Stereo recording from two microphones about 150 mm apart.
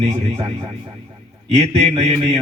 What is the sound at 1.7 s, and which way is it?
Mantra, 40° right (ahead or behind).